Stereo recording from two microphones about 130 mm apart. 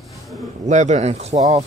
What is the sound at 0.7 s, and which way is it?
Speech, 65° right (ahead or behind).